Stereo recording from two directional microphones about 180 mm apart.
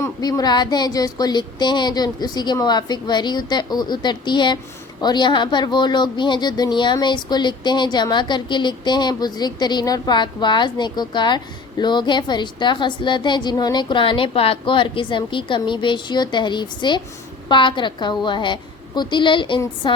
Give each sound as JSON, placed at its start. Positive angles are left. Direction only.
{"t": 0.0, "sound": "a woman's voice", "side_deg": 20}